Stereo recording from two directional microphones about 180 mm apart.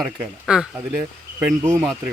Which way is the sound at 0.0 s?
5° right (ahead or behind).